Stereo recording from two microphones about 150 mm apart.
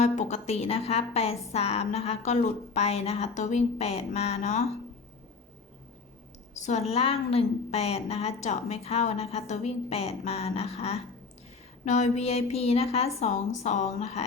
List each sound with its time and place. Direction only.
0.0 s a woman's voice: 50° left (ahead or behind)
6.6 s a woman's voice: 50° left (ahead or behind)